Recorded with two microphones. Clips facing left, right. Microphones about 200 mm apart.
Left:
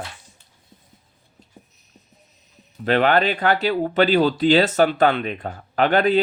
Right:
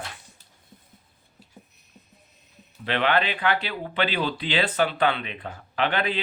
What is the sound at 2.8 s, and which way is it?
Speech, 45° left (ahead or behind).